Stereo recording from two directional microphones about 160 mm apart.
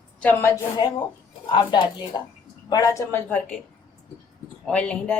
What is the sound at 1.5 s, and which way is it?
Speech, 30° left (ahead or behind).